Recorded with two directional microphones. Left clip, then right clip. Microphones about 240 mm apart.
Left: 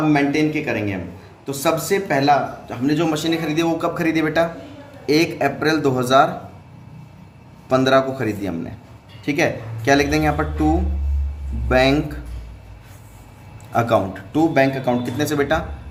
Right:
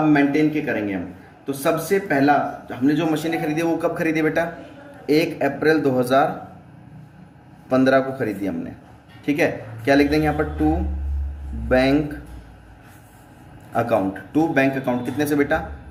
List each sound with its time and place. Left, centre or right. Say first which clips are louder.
0.1 s speech: even; left
7.7 s speech: left 2 dB; left
11.7 s speech: left 2 dB; left
13.7 s speech: left 2 dB; left